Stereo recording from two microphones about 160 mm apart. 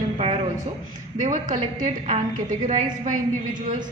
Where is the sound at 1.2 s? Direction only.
55° right (ahead or behind).